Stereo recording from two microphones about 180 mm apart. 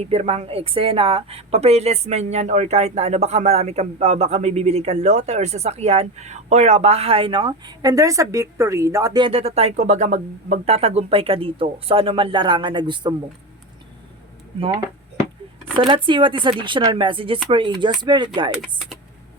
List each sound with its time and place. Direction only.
0.0 s speech: 35° right (ahead or behind)
15.9 s speech: 25° right (ahead or behind)